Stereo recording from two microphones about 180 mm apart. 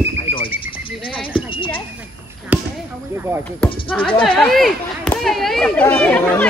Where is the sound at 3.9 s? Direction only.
Centre (ahead or behind).